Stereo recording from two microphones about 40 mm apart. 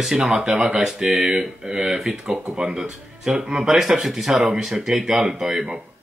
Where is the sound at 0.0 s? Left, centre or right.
Centre.